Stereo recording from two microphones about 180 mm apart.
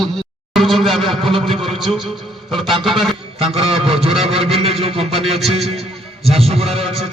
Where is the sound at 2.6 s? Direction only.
30° right (ahead or behind).